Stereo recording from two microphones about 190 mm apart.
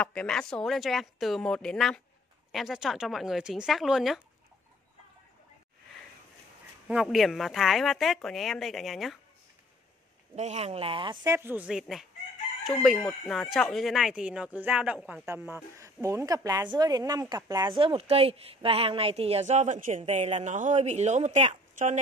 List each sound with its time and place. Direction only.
0.0 s speech: 5° left (ahead or behind)
6.9 s speech: centre (ahead or behind)
10.3 s a woman's voice: 35° right (ahead or behind)
11.3 s a woman's voice: 10° right (ahead or behind); by 21.9 s 35° right (ahead or behind)